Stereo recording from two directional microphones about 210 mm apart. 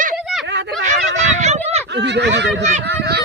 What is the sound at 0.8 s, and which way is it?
Fowl, 35° right (ahead or behind).